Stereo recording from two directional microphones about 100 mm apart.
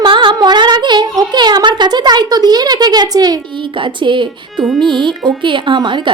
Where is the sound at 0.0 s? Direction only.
50° right (ahead or behind).